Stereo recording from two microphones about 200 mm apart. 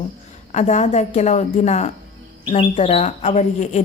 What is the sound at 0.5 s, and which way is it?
A woman's voice, 35° left (ahead or behind).